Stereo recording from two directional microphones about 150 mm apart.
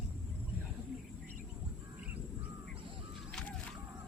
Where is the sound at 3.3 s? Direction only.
5° left (ahead or behind).